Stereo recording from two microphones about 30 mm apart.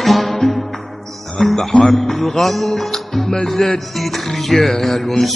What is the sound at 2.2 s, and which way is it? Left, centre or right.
Music, centre.